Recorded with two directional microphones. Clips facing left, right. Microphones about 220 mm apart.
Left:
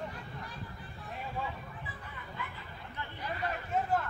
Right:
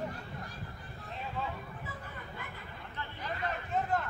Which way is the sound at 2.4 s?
45° right (ahead or behind).